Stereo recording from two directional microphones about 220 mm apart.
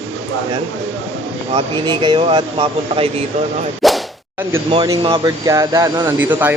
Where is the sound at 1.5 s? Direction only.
20° right (ahead or behind).